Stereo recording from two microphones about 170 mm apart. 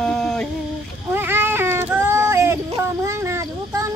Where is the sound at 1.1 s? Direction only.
15° right (ahead or behind).